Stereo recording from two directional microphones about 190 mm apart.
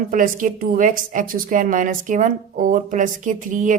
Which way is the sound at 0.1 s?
45° right (ahead or behind).